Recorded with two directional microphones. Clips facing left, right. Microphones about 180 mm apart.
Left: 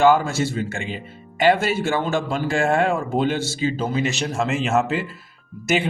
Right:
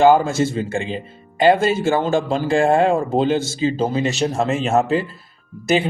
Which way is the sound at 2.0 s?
30° right (ahead or behind).